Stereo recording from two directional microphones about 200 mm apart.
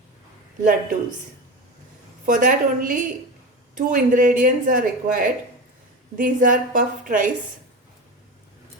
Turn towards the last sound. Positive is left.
turn(degrees=-40)  # may be behind; listen again after turning